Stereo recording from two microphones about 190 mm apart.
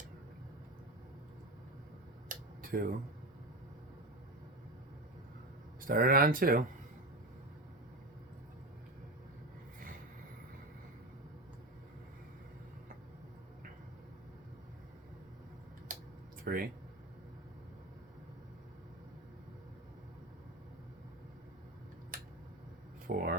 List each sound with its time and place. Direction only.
2.3 s a sound: 50° right (ahead or behind)
5.9 s speech: 50° right (ahead or behind)
16.4 s speech: 50° right (ahead or behind)
23.0 s speech: 50° right (ahead or behind)